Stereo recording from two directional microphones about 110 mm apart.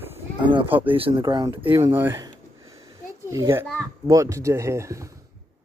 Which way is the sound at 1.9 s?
20° right (ahead or behind).